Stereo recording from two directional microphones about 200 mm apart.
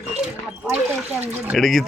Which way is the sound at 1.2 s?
10° right (ahead or behind).